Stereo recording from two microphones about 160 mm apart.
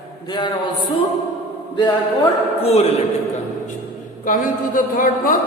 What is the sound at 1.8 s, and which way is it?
Speech, 30° left (ahead or behind).